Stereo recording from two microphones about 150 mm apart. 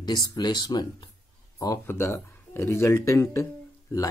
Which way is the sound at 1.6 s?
20° left (ahead or behind).